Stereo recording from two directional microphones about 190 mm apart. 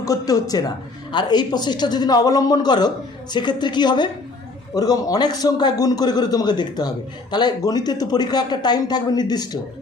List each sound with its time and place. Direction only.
0.0 s a man's voice: 20° left (ahead or behind)